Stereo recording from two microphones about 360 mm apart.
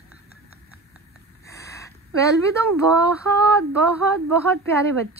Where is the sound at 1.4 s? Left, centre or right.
Centre.